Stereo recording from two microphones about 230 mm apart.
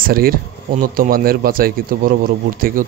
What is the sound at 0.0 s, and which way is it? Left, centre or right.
A man's voice, right.